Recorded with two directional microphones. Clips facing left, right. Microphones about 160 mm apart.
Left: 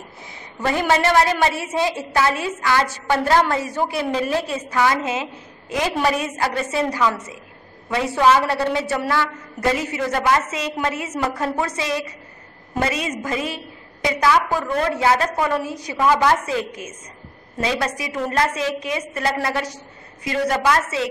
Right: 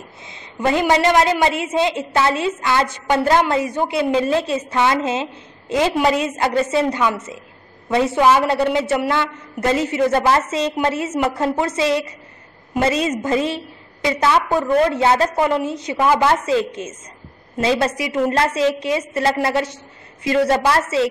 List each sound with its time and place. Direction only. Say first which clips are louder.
0.2 s a woman's voice: right 4 dB; 20° right (ahead or behind)